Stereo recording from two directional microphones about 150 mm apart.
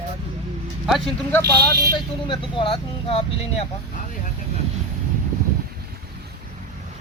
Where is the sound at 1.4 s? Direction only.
90° right.